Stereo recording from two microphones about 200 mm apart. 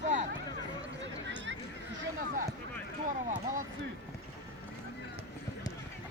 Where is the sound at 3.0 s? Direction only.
40° right (ahead or behind).